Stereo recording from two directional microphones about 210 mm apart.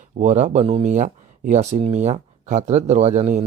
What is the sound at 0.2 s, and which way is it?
Speech, 35° right (ahead or behind).